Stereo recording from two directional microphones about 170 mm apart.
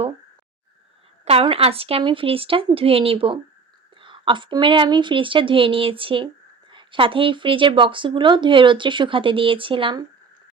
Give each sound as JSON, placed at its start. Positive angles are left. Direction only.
{"t": 1.2, "sound": "a woman's voice", "side_deg": -35}